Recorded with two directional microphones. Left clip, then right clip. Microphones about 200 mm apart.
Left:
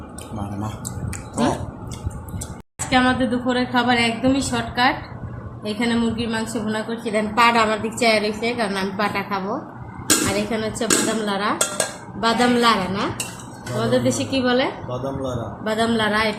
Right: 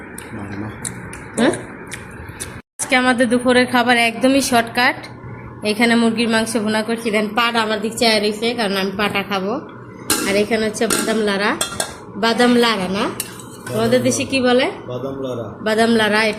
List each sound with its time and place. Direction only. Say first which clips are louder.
2.9 s a woman's voice: right 4 dB; 35° right (ahead or behind)